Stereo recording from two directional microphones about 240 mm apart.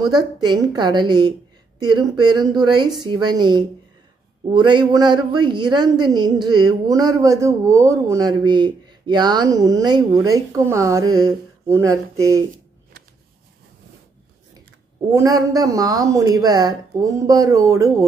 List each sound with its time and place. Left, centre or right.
0.0 s a man's voice: centre
15.1 s a man's voice: centre